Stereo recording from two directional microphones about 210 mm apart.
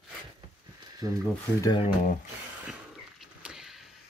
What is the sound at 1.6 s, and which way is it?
Speech, 20° left (ahead or behind).